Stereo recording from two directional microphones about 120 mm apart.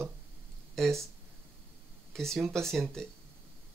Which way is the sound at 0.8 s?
5° left (ahead or behind).